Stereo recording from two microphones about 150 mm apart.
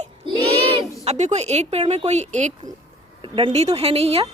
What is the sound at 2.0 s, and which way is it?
Speech, 50° right (ahead or behind).